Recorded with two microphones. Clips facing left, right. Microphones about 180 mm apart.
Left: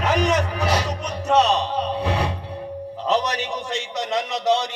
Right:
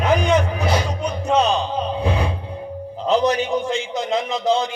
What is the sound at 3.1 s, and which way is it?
Music, 40° left (ahead or behind).